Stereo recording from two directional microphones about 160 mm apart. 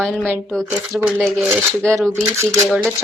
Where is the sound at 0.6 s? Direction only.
15° right (ahead or behind).